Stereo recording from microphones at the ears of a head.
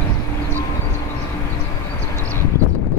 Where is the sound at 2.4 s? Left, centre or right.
Left.